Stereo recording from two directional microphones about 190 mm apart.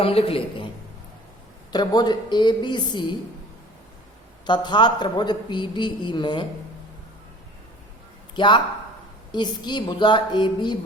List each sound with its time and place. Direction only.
0.0 s a man's voice: 30° left (ahead or behind)
1.7 s a man's voice: 20° left (ahead or behind)
4.4 s a man's voice: 25° left (ahead or behind)
8.4 s a man's voice: 25° left (ahead or behind)